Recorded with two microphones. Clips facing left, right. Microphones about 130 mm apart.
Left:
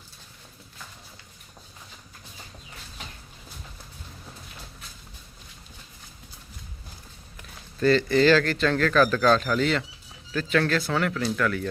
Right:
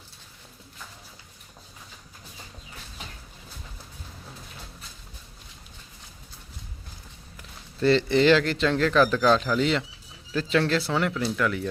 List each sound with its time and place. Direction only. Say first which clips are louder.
7.8 s a man's voice: even; 25° right (ahead or behind)